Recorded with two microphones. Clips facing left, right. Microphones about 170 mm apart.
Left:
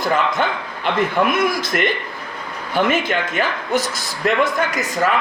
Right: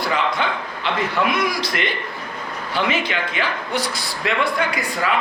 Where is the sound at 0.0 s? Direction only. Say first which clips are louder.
Left 3 dB; 45° left (ahead or behind).